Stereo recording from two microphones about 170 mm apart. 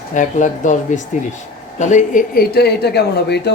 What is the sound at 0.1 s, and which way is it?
Speech, 45° left (ahead or behind).